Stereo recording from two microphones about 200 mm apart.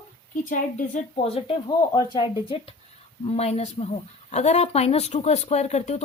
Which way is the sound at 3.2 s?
30° left (ahead or behind).